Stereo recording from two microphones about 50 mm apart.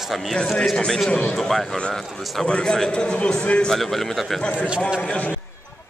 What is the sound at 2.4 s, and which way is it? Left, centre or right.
A man's voice, centre.